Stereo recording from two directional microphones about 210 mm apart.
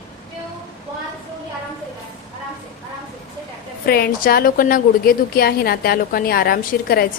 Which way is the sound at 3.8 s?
45° left (ahead or behind).